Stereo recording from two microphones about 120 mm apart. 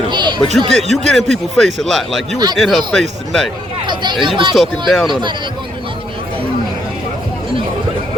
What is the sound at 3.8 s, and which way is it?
Speech, 40° right (ahead or behind).